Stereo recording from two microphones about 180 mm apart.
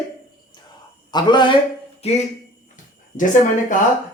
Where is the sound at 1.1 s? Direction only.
25° left (ahead or behind).